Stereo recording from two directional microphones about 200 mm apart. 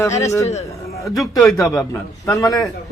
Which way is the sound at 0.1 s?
35° left (ahead or behind).